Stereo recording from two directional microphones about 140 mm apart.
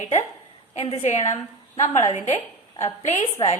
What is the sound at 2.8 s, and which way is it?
Speech, 50° left (ahead or behind).